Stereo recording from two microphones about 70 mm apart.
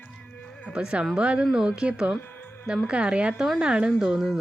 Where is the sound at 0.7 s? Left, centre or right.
Centre.